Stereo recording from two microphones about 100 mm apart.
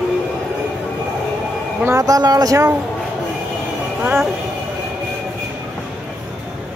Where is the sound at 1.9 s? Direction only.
35° right (ahead or behind).